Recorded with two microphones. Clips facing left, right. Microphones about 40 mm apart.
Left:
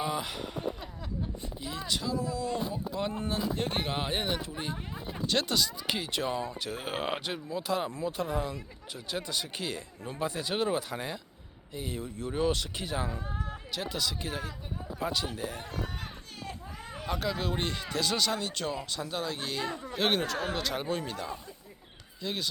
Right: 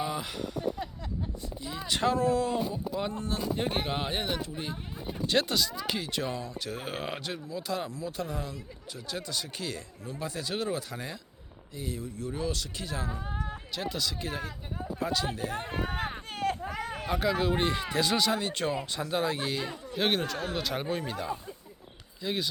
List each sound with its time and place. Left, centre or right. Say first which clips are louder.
0.0 s speech: even; centre
2.0 s speech: right 10 dB; right
2.7 s speech: right 1 dB; centre
3.6 s speech: right 1 dB; centre
7.9 s speech: left 3 dB; left
8.1 s speech: left 3 dB; centre
13.1 s speech: right 1 dB; centre
13.7 s speech: even; centre
15.5 s a sound: right 5 dB; right
17.1 s speech: right 4 dB; centre
19.7 s a sound: left 2 dB; centre
20.0 s speech: even; centre